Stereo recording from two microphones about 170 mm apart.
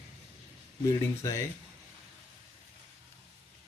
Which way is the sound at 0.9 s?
20° left (ahead or behind).